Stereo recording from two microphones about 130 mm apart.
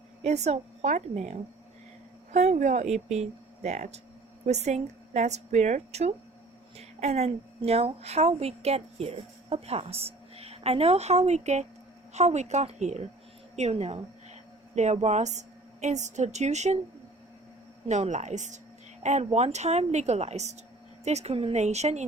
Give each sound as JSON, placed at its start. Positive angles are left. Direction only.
{"t": 0.2, "sound": "a woman's voice", "side_deg": -60}
{"t": 17.8, "sound": "a woman's voice", "side_deg": -60}